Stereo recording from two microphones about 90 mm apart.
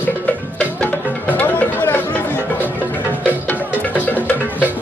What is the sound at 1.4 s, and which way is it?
Music, 20° left (ahead or behind).